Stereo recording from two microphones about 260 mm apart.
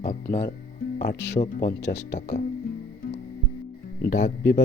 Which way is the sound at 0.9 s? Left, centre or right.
Left.